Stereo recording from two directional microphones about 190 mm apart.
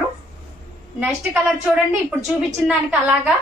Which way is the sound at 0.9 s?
5° right (ahead or behind).